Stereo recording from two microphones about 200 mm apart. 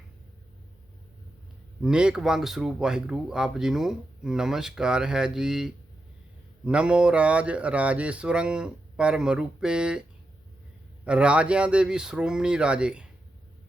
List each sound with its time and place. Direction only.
1.8 s speech: 5° right (ahead or behind)
11.0 s speech: 5° right (ahead or behind)